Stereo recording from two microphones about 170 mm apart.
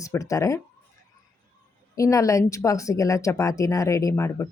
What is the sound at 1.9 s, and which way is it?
A woman's voice, 20° left (ahead or behind).